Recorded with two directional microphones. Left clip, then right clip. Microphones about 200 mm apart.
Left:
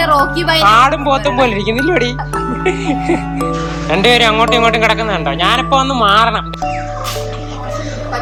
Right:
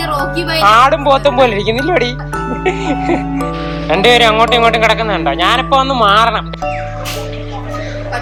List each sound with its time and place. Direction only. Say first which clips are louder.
0.2 s a man's voice: left 2 dB; 5° left (ahead or behind)